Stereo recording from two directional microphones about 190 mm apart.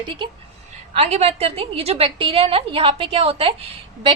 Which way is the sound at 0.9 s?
35° right (ahead or behind).